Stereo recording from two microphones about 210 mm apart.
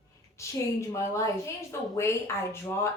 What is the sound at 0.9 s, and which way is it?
Speech, 15° left (ahead or behind).